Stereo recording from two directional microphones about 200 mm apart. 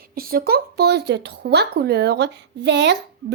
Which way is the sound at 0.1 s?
45° right (ahead or behind).